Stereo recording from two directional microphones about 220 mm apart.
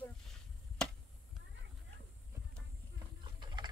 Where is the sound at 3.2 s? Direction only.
20° right (ahead or behind).